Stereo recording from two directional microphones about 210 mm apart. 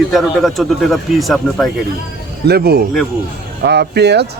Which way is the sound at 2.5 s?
50° right (ahead or behind).